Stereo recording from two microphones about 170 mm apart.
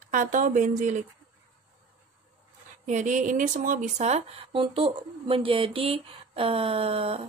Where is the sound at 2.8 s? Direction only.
45° right (ahead or behind).